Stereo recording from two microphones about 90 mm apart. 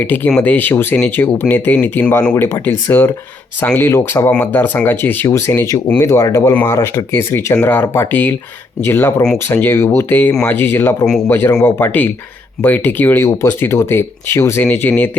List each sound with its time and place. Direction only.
0.0 s speech: 20° left (ahead or behind)
11.0 s a man's voice: 5° left (ahead or behind)
11.3 s speech: 25° left (ahead or behind)